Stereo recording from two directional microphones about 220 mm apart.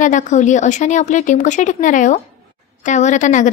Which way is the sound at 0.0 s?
35° left (ahead or behind).